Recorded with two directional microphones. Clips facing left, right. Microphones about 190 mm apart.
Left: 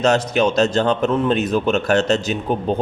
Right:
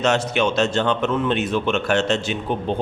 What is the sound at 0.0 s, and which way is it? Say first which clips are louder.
A man's voice: left 3 dB; 40° left (ahead or behind).